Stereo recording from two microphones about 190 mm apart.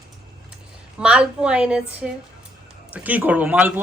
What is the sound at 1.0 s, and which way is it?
A woman's voice, 5° right (ahead or behind).